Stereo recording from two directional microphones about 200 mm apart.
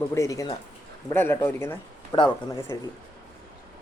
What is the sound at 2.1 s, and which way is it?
Speech, 25° left (ahead or behind).